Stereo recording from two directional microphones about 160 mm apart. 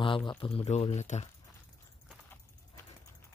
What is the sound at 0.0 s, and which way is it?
Speech, 30° left (ahead or behind).